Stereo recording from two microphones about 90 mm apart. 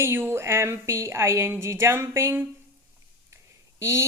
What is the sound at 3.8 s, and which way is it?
Speech, 30° right (ahead or behind).